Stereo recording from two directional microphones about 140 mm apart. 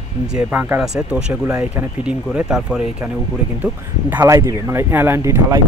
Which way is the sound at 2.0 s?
5° right (ahead or behind).